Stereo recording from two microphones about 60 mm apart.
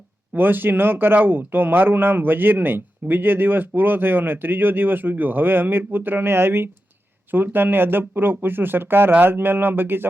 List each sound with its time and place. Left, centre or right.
0.3 s speech: right